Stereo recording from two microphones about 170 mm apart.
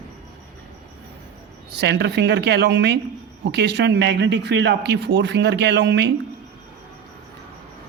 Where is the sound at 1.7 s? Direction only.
80° right.